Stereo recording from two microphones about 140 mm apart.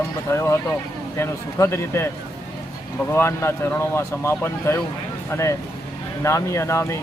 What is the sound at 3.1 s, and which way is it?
Speech, 20° left (ahead or behind).